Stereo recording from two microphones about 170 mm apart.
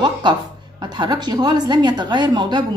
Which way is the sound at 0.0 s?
25° right (ahead or behind).